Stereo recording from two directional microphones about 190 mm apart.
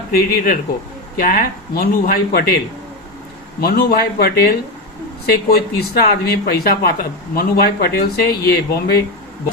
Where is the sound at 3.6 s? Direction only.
55° left (ahead or behind).